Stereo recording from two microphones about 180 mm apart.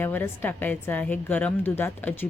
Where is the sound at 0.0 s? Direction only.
10° left (ahead or behind).